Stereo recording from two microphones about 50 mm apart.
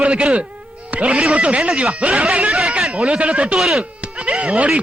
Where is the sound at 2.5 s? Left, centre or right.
Centre.